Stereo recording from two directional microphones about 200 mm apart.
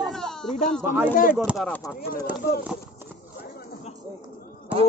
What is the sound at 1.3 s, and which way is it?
Speech, centre (ahead or behind).